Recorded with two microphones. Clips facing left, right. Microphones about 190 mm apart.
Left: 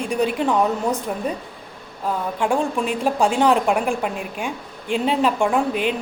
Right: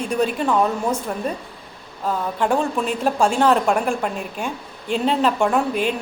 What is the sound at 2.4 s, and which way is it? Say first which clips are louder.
A woman's voice: even; 10° left (ahead or behind).